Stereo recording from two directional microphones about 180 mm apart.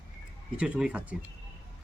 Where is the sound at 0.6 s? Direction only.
5° right (ahead or behind).